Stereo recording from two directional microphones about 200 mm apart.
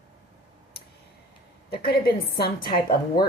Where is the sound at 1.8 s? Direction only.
50° left (ahead or behind).